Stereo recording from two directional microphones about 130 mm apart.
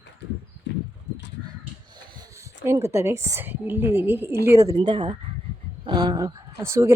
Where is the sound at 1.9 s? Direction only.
35° right (ahead or behind).